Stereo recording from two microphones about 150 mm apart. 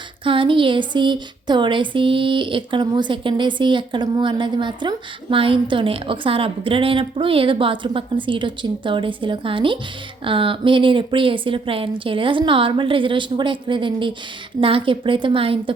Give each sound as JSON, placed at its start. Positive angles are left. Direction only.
{"t": 0.3, "sound": "speech", "side_deg": -35}